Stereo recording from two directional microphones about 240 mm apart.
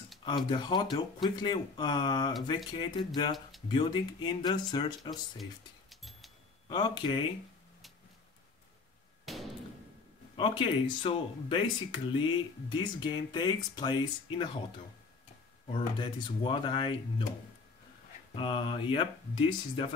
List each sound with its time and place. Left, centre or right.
0.5 s speech: centre
5.4 s music: centre
6.7 s speech: centre
9.2 s a sound: centre
10.3 s speech: left
15.7 s speech: left
18.3 s speech: left